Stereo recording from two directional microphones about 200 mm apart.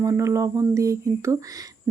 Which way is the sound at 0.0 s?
15° right (ahead or behind).